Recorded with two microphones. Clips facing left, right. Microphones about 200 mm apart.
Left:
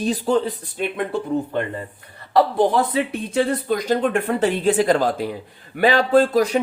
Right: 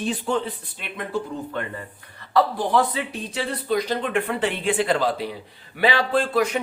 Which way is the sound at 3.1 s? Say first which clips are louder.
Left 8 dB; 50° left (ahead or behind).